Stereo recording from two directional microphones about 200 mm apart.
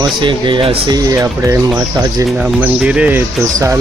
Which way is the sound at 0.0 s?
25° right (ahead or behind).